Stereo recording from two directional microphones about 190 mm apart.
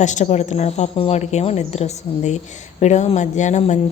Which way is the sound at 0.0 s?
40° left (ahead or behind).